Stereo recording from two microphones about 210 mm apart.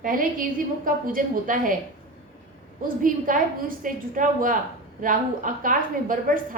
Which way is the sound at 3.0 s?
40° right (ahead or behind).